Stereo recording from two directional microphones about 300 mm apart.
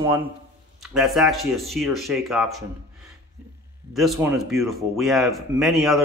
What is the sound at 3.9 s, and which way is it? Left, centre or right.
A man's voice, centre.